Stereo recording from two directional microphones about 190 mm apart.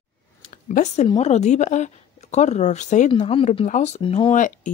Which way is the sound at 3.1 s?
30° left (ahead or behind).